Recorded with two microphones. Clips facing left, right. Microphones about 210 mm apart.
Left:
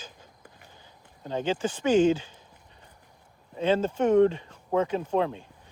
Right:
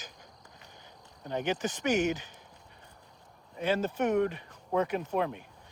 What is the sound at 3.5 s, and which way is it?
Speech, 25° left (ahead or behind).